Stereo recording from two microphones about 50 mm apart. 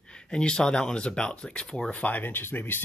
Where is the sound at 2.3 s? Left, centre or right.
Left.